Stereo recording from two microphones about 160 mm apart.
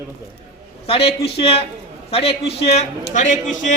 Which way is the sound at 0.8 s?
35° left (ahead or behind).